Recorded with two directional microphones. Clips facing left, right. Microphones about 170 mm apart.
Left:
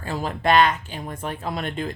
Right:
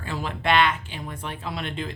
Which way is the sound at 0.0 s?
40° left (ahead or behind).